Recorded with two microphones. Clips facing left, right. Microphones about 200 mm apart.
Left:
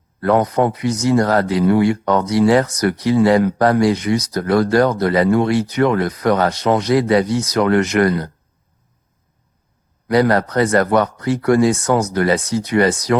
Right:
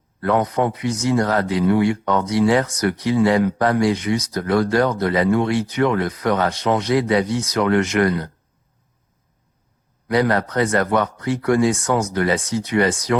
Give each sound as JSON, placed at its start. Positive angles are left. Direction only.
{"t": 0.2, "sound": "speech", "side_deg": 40}
{"t": 10.1, "sound": "speech", "side_deg": 40}